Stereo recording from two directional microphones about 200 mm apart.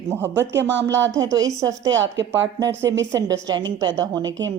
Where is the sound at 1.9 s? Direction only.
65° right (ahead or behind).